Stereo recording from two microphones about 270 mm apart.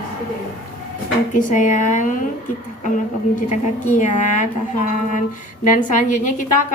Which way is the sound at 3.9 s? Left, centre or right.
Left.